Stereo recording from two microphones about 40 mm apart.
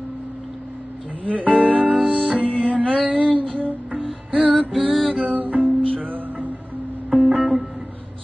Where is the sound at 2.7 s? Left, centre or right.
Right.